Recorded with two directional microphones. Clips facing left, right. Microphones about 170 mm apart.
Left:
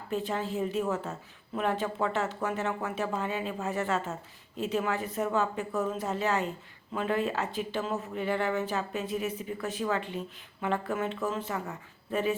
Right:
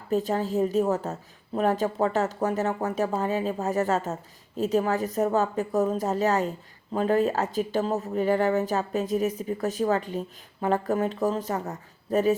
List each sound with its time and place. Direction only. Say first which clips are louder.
0.1 s a woman's voice: right 6 dB; 40° right (ahead or behind)